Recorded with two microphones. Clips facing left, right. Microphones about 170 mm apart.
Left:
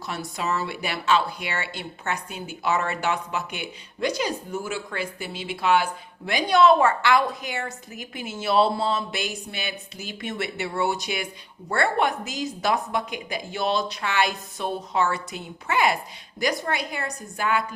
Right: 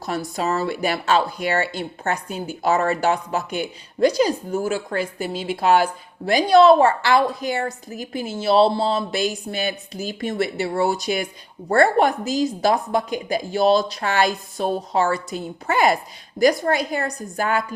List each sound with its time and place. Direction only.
0.0 s speech: 40° right (ahead or behind)